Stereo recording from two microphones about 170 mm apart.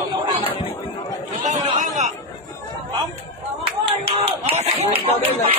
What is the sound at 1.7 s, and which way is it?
Chatter, 45° right (ahead or behind).